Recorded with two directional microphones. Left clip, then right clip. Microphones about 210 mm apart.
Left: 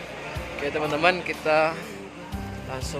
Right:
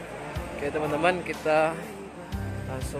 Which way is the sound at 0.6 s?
5° right (ahead or behind).